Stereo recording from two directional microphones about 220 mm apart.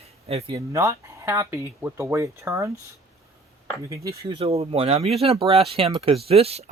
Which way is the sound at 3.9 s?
20° right (ahead or behind).